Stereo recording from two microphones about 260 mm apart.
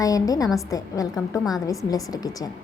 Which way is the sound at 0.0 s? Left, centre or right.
Centre.